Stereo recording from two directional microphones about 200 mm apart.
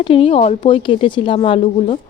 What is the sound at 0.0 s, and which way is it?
Speech, 25° left (ahead or behind).